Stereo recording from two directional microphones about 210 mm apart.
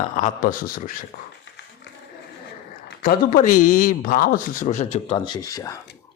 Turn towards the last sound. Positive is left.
turn(degrees=15)  # may be behind; listen again after turning